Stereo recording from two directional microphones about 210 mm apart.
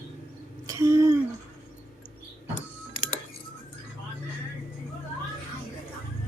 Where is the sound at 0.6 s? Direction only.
15° right (ahead or behind).